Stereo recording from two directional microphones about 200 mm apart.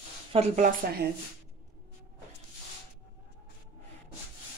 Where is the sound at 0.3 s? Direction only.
35° right (ahead or behind).